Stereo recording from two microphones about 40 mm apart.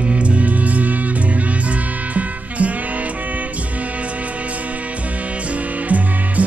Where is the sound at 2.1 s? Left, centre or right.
Right.